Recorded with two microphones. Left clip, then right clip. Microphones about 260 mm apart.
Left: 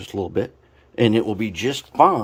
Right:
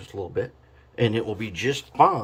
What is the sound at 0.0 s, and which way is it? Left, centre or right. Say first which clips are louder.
Speech: left 5 dB; left.